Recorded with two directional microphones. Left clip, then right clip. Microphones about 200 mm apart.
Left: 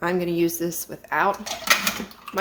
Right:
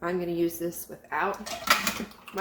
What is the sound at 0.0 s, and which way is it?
Speech, 55° left (ahead or behind).